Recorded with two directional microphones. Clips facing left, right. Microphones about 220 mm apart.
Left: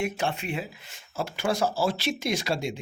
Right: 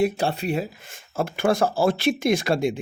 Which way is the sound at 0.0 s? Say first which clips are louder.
Right 6 dB; 35° right (ahead or behind).